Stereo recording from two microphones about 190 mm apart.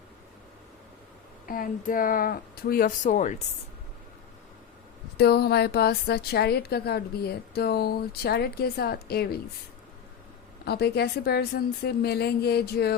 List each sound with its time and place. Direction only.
1.5 s speech: 45° left (ahead or behind)
5.1 s a woman's voice: 55° left (ahead or behind)
10.7 s a woman's voice: 55° left (ahead or behind)